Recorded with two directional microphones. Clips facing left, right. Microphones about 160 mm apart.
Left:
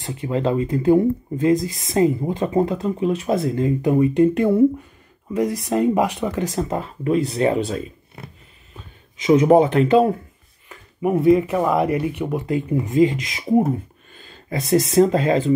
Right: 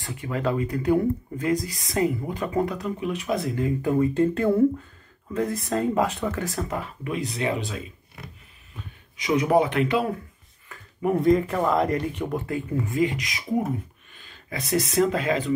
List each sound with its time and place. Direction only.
0.0 s speech: 25° left (ahead or behind)
3.8 s speech: 15° left (ahead or behind); by 8.3 s 35° left (ahead or behind)
9.2 s speech: 25° left (ahead or behind)
11.0 s speech: 10° left (ahead or behind); by 15.5 s 30° left (ahead or behind)